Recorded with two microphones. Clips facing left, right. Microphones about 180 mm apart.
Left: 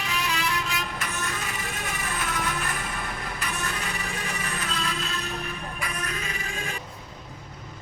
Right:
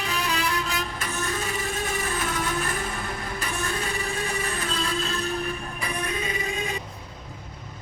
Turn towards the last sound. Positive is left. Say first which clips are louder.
# right 5 dB
turn(degrees=-20)  # may be behind; listen again after turning